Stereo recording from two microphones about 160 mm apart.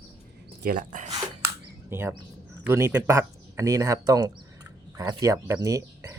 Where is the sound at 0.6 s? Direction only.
65° right (ahead or behind).